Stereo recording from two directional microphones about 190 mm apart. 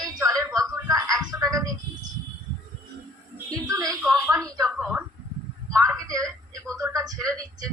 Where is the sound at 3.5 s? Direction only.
20° right (ahead or behind).